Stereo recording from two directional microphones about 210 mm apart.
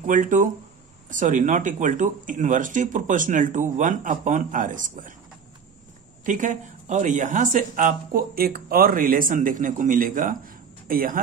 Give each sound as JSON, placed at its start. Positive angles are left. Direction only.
{"t": 0.0, "sound": "speech", "side_deg": -40}
{"t": 6.2, "sound": "speech", "side_deg": -35}